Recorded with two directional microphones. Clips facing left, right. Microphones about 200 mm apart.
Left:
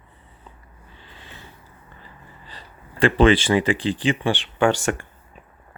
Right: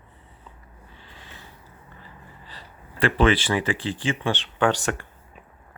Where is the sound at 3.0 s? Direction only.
25° left (ahead or behind).